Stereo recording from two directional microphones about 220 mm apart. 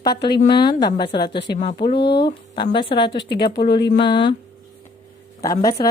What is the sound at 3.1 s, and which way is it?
Speech, 50° left (ahead or behind).